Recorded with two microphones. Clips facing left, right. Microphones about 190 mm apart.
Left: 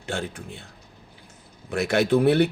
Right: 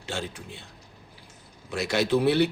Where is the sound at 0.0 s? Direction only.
55° left (ahead or behind).